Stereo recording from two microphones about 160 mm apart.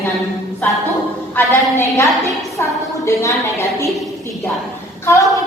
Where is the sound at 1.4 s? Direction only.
15° left (ahead or behind).